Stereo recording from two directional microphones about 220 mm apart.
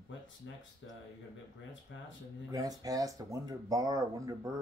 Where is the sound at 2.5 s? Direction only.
15° right (ahead or behind).